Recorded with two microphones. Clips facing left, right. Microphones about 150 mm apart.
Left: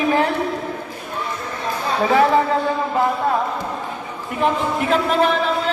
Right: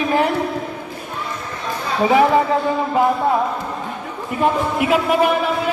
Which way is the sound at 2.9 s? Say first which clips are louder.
Right 4 dB; 15° right (ahead or behind).